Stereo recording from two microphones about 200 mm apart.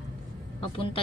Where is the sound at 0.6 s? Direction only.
25° left (ahead or behind).